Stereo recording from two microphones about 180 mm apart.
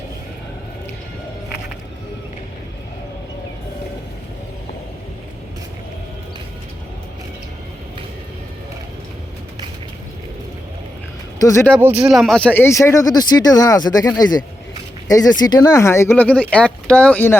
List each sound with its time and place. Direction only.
11.3 s speech: 15° left (ahead or behind)
11.8 s speech: 10° right (ahead or behind)
12.0 s speech: centre (ahead or behind)